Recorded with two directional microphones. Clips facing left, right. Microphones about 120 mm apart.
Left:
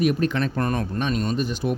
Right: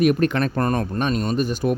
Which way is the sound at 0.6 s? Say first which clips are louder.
Right 3 dB; 45° right (ahead or behind).